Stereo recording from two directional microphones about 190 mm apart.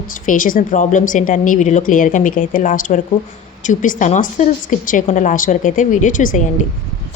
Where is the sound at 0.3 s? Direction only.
45° left (ahead or behind).